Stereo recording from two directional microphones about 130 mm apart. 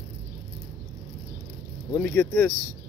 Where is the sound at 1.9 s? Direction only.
15° left (ahead or behind).